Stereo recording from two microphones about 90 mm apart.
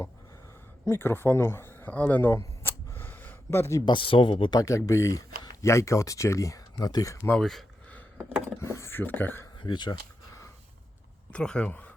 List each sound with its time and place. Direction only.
0.9 s speech: 25° left (ahead or behind)
2.3 s a sound: 30° left (ahead or behind)
3.9 s speech: 75° left (ahead or behind)
4.9 s speech: 35° left (ahead or behind)
7.3 s speech: 5° left (ahead or behind)
8.6 s a sound: 30° left (ahead or behind)
9.6 s speech: 55° left (ahead or behind)
11.3 s speech: 10° left (ahead or behind)
11.7 s a sound: 15° left (ahead or behind)